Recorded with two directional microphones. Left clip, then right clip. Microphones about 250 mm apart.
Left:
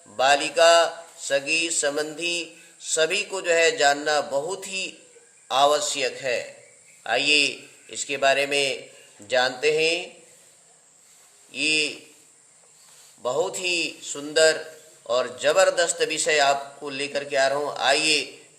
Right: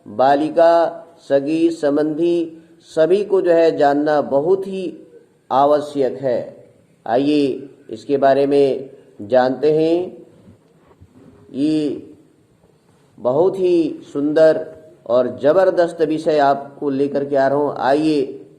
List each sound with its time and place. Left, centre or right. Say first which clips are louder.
0.2 s a man's voice: right 5 dB; left
11.5 s a man's voice: right 3 dB; left
13.2 s a man's voice: right 9 dB; left